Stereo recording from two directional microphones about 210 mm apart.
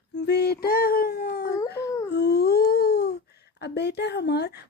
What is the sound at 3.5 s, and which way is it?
Speech, 55° left (ahead or behind).